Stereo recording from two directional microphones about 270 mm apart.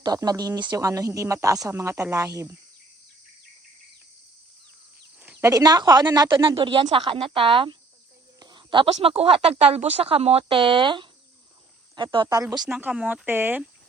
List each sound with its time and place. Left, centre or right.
0.0 s speech: centre
5.2 s speech: centre